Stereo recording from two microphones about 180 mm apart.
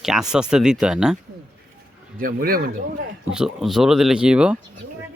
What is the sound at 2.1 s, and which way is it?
Speech, 55° right (ahead or behind).